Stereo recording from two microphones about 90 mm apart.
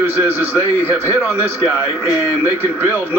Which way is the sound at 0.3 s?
25° right (ahead or behind).